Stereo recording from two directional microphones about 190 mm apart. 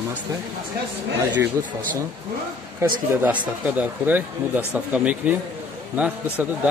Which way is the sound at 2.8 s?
15° right (ahead or behind).